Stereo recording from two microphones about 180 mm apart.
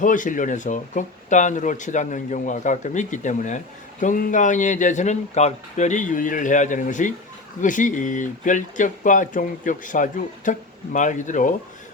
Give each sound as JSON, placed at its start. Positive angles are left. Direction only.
{"t": 0.0, "sound": "speech", "side_deg": 45}